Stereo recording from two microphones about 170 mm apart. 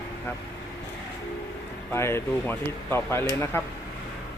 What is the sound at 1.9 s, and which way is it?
Speech, 15° left (ahead or behind).